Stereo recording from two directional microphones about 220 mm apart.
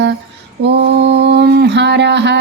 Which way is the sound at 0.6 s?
50° right (ahead or behind).